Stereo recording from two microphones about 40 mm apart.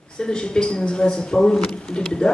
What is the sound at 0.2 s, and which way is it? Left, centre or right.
Speech, left.